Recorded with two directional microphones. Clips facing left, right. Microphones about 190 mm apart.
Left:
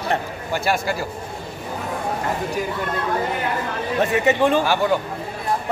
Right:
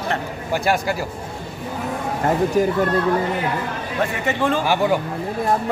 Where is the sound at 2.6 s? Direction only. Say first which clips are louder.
Right 11 dB; 45° right (ahead or behind).